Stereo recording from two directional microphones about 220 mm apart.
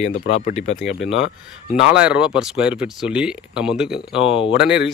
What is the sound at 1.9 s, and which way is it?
Speech, 5° right (ahead or behind).